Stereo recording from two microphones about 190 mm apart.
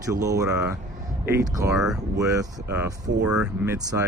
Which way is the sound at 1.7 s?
5° right (ahead or behind).